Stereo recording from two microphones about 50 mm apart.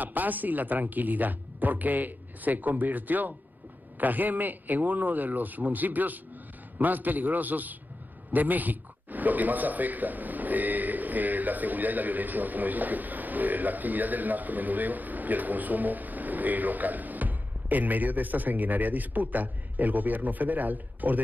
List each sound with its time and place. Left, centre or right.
0.0 s a man's voice: right